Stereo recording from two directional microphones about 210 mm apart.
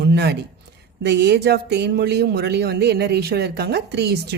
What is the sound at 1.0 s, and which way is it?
Speech, 55° right (ahead or behind).